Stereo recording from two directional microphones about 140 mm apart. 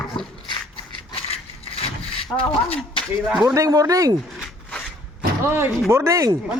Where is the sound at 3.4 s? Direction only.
25° right (ahead or behind).